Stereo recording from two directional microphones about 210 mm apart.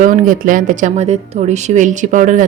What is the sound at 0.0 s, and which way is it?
Speech, 40° right (ahead or behind).